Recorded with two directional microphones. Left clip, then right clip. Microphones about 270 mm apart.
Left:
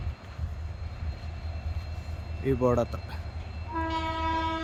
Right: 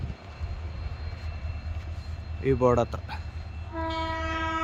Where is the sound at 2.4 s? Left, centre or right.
Centre.